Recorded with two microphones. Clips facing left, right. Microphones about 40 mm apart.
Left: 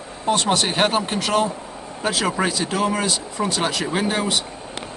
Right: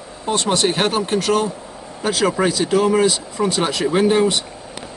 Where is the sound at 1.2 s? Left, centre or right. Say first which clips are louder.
Right 1 dB; left.